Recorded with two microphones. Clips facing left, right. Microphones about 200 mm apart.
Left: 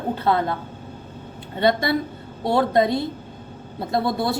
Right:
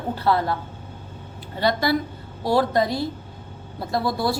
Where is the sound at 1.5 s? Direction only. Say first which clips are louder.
Left 2 dB; 25° left (ahead or behind).